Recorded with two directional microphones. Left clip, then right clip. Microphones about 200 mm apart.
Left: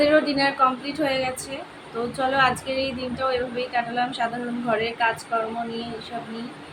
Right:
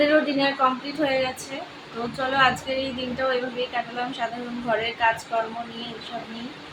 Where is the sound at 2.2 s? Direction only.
Centre (ahead or behind).